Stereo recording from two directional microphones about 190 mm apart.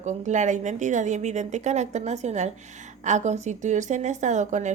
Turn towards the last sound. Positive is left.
turn(degrees=-40)  # may be behind; listen again after turning